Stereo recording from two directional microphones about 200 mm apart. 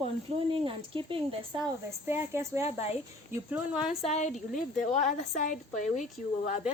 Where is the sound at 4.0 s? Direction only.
35° left (ahead or behind).